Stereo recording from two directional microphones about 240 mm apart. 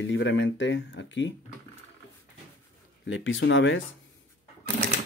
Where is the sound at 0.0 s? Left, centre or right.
Left.